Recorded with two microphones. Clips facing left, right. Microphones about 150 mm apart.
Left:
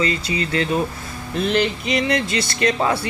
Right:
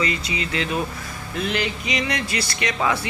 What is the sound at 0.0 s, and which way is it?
Speech, 35° left (ahead or behind).